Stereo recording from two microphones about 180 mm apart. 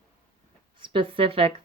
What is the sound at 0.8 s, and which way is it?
Speech, 30° right (ahead or behind).